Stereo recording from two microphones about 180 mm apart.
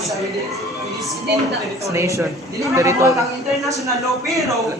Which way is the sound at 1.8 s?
15° right (ahead or behind).